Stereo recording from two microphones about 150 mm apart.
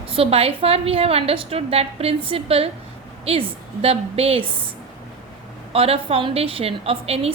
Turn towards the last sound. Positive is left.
turn(degrees=-40)  # may be behind; listen again after turning